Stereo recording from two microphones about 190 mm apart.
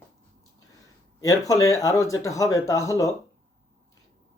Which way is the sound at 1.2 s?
15° left (ahead or behind).